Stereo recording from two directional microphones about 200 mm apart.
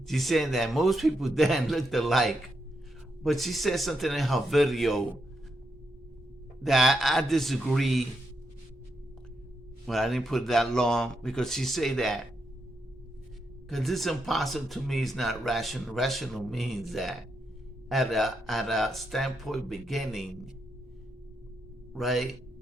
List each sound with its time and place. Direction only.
0.1 s speech: centre (ahead or behind)
6.6 s speech: centre (ahead or behind)
9.8 s speech: centre (ahead or behind)
13.7 s speech: centre (ahead or behind)
21.9 s speech: centre (ahead or behind)